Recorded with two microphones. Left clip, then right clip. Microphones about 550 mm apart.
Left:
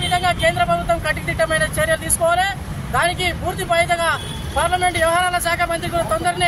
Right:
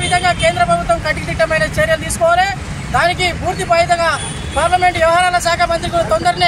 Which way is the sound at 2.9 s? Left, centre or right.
Left.